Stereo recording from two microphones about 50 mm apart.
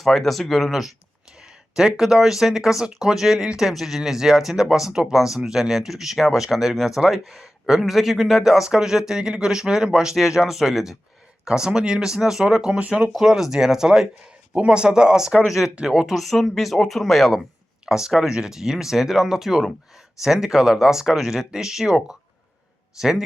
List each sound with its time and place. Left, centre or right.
0.0 s a woman's voice: centre; by 13.1 s right
13.1 s speech: centre
15.7 s speech: centre
16.1 s a woman's voice: centre
17.8 s speech: centre